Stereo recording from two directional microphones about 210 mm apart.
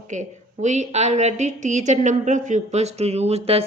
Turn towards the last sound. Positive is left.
turn(degrees=-30)  # may be behind; listen again after turning